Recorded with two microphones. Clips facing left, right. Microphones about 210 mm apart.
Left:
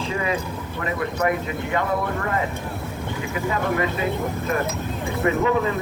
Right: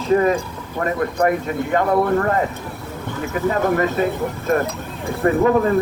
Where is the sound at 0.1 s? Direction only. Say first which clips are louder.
Right 12 dB; 50° right (ahead or behind).